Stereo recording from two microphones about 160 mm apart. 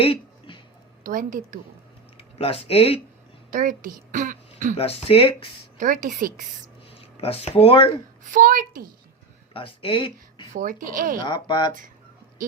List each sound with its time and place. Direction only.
0.0 s a sound: 35° left (ahead or behind)
1.0 s a child's voice: 60° right (ahead or behind)
2.1 s speech: 35° left (ahead or behind)
3.5 s a woman's voice: 60° right (ahead or behind)
4.8 s speech: 40° left (ahead or behind)
5.8 s a child's voice: 55° right (ahead or behind)
7.2 s speech: 40° left (ahead or behind)
8.2 s a child's voice: 55° right (ahead or behind)
9.5 s speech: 35° left (ahead or behind)
10.5 s a child's voice: 55° right (ahead or behind)
11.2 s speech: 30° left (ahead or behind)